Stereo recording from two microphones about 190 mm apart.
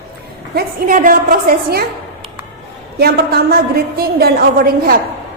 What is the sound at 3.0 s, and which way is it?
A woman's voice, 55° right (ahead or behind).